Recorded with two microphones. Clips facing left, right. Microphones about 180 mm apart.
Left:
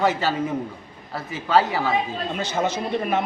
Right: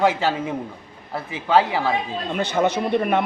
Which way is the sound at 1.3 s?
15° right (ahead or behind).